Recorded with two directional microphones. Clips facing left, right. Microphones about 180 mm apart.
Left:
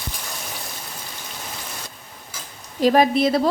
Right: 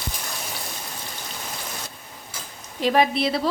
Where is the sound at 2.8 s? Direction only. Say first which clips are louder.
Left 4 dB; 40° left (ahead or behind).